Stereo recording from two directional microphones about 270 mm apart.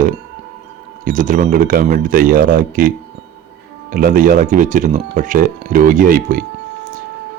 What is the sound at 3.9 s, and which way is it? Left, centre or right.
Speech, right.